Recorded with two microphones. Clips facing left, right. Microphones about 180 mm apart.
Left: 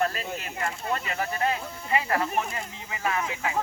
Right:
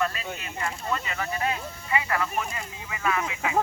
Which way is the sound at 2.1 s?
35° left (ahead or behind).